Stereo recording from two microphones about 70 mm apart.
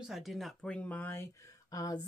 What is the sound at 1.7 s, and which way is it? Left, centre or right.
Speech, left.